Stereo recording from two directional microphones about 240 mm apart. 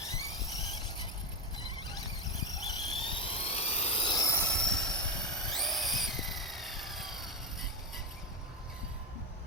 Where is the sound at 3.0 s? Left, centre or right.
Left; by 7.6 s centre.